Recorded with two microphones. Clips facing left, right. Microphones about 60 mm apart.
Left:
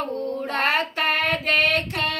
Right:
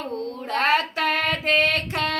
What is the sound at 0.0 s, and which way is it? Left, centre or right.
Child singing, left.